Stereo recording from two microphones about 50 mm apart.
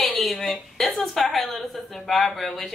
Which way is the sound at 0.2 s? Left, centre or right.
Centre.